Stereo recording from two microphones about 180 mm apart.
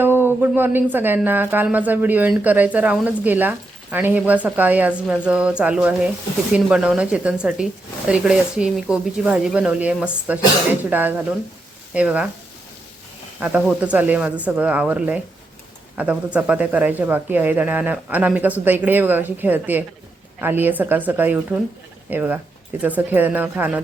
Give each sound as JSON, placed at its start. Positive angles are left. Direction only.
{"t": 0.0, "sound": "speech", "side_deg": -10}
{"t": 13.4, "sound": "speech", "side_deg": -5}